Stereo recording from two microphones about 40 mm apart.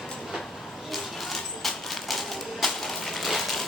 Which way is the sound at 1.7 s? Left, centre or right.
Centre.